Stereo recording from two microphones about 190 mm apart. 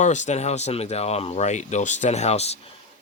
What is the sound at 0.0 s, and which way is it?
Speech, 40° left (ahead or behind).